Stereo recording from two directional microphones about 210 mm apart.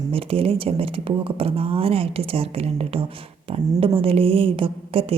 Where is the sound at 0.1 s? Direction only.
25° right (ahead or behind).